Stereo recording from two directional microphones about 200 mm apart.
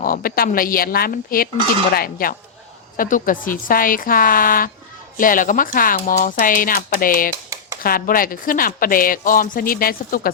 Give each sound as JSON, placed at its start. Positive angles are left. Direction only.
{"t": 0.0, "sound": "speech", "side_deg": 45}